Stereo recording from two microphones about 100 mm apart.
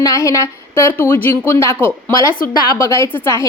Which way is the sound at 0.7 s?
20° left (ahead or behind).